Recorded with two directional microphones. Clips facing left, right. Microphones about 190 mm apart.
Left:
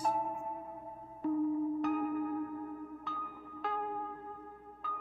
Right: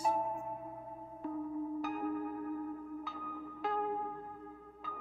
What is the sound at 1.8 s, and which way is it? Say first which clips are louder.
Singing bowl: left 6 dB; centre (ahead or behind).